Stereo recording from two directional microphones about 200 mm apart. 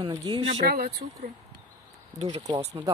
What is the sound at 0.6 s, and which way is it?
Speech, 50° right (ahead or behind).